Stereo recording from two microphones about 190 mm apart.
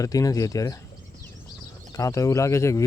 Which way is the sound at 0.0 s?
20° left (ahead or behind).